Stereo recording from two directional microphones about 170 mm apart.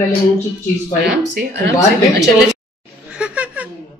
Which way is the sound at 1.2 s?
80° right.